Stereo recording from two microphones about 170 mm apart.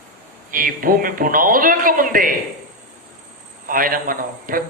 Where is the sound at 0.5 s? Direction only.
55° right (ahead or behind).